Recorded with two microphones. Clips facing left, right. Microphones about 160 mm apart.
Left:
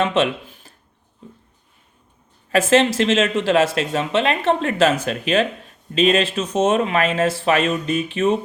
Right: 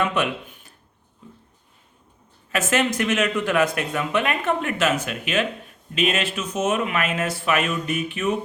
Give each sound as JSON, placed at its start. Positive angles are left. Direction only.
{"t": 0.2, "sound": "speech", "side_deg": 30}
{"t": 2.5, "sound": "speech", "side_deg": 30}